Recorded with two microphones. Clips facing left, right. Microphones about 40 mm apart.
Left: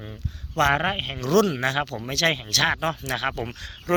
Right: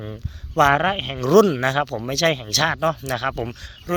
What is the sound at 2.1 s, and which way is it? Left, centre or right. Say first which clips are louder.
Speech: right 2 dB; centre.